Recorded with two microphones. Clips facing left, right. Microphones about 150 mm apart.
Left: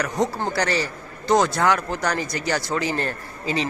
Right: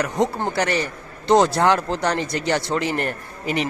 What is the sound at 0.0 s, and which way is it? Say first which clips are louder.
A man's voice: right 2 dB; 20° right (ahead or behind).